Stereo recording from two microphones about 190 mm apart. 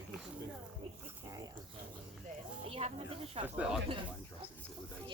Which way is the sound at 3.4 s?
25° right (ahead or behind).